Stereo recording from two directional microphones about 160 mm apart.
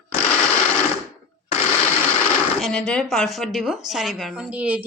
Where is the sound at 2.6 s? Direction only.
5° left (ahead or behind).